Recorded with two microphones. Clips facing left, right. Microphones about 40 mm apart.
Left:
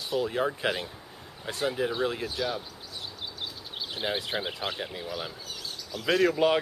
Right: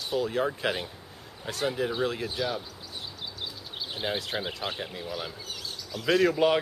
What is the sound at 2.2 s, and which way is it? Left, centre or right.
Speech, centre.